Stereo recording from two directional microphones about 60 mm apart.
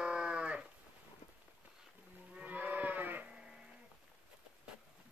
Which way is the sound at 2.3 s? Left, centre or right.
Right.